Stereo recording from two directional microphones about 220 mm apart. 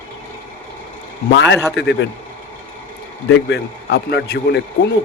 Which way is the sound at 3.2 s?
50° left (ahead or behind).